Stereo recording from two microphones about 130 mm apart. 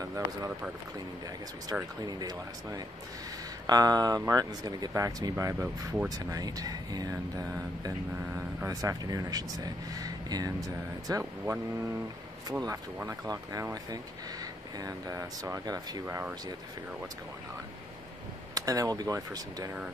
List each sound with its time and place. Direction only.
0.0 s speech: 25° right (ahead or behind)
1.7 s speech: 30° right (ahead or behind)
18.5 s speech: 30° right (ahead or behind)